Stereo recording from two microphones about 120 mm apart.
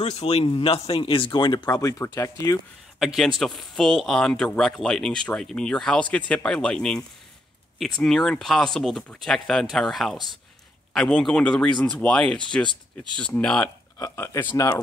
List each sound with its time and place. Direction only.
0.0 s speech: 60° left (ahead or behind); by 2.6 s 25° left (ahead or behind)
3.0 s speech: 5° right (ahead or behind)
13.9 s speech: 20° left (ahead or behind)
14.4 s speech: 40° left (ahead or behind)